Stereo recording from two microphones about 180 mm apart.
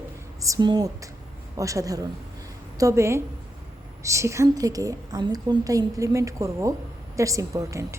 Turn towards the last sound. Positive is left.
turn(degrees=-15)  # may be behind; listen again after turning